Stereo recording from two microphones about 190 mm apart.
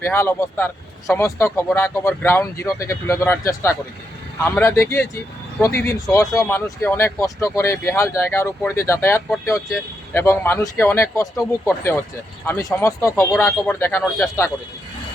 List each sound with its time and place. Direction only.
0.0 s speech: 10° left (ahead or behind)